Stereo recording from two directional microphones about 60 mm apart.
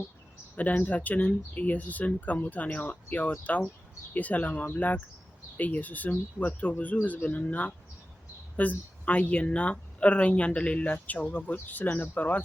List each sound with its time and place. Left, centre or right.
0.5 s speech: left